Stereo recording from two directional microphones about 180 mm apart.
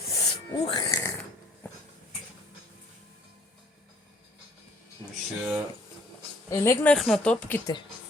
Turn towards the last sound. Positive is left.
turn(degrees=10)  # may be behind; listen again after turning